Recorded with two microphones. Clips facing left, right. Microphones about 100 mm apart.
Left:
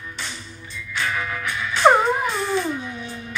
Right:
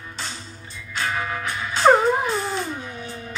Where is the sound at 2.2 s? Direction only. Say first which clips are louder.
Left 2 dB; 30° right (ahead or behind).